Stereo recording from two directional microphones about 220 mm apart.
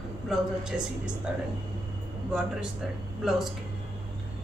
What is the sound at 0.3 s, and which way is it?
Speech, 5° right (ahead or behind).